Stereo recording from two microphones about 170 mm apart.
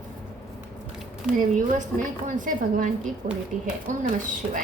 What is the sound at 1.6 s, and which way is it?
Speech, 50° right (ahead or behind).